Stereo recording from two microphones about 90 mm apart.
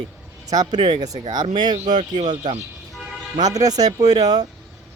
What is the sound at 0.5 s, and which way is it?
Speech, 45° right (ahead or behind).